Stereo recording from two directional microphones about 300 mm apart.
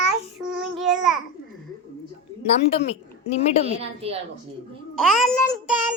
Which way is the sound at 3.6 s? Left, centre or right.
Centre.